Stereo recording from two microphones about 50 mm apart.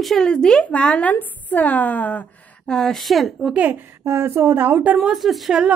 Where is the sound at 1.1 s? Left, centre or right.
Left.